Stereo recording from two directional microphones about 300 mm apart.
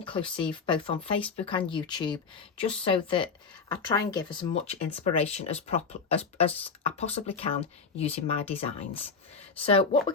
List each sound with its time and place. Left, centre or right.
0.0 s speech: centre